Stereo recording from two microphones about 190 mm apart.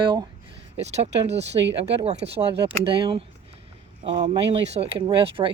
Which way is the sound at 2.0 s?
35° right (ahead or behind).